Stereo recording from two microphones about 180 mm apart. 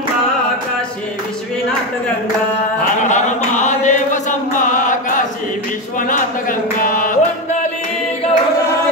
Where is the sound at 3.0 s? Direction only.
40° left (ahead or behind).